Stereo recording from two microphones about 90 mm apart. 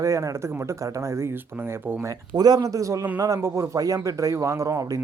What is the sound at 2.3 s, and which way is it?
Speech, 45° right (ahead or behind).